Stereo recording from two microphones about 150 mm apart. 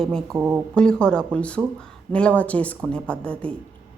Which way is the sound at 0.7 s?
5° left (ahead or behind).